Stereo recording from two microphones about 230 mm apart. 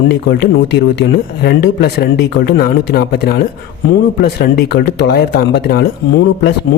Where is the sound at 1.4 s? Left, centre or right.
Left.